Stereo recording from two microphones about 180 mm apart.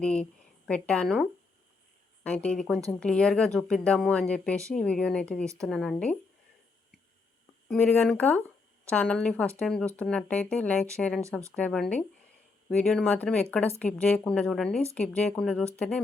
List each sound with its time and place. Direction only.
0.0 s a woman's voice: 5° left (ahead or behind)
7.7 s a woman's voice: 10° left (ahead or behind)
11.2 s speech: 15° right (ahead or behind)
11.5 s a woman's voice: 5° left (ahead or behind)